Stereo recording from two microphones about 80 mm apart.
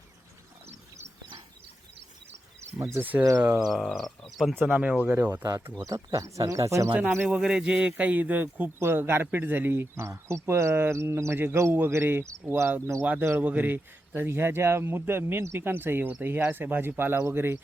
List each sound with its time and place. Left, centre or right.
3.0 s a man's voice: right
3.6 s speech: centre
4.7 s a man's voice: centre
5.3 s speech: right
7.3 s a man's voice: centre; by 17.6 s right